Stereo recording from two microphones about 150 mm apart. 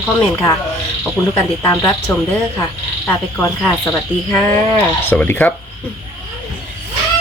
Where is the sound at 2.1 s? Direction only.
15° left (ahead or behind).